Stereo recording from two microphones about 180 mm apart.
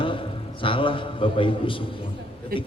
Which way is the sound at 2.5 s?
55° right (ahead or behind).